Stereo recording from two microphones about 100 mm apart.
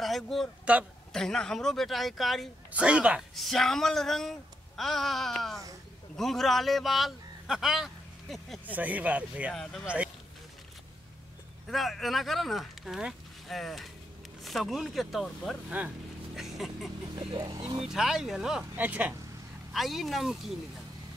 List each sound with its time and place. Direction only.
0.0 s speech: centre (ahead or behind)
2.7 s speech: 10° right (ahead or behind)
3.3 s speech: centre (ahead or behind)
8.6 s speech: 15° right (ahead or behind)
9.5 s speech: 5° left (ahead or behind)
11.6 s speech: centre (ahead or behind)
15.8 s speech: 15° right (ahead or behind)
16.3 s a sound: 5° right (ahead or behind)
17.8 s speech: 5° right (ahead or behind)
19.7 s speech: centre (ahead or behind)